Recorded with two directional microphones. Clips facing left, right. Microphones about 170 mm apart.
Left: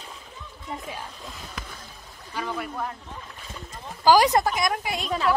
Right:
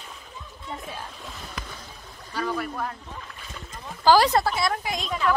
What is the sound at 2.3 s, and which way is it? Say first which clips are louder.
Speech: right 2 dB; 15° left (ahead or behind).